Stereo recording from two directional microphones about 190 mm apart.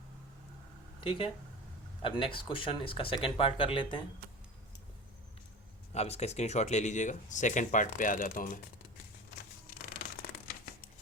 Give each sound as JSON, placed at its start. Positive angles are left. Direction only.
{"t": 1.0, "sound": "speech", "side_deg": 25}
{"t": 5.9, "sound": "speech", "side_deg": 35}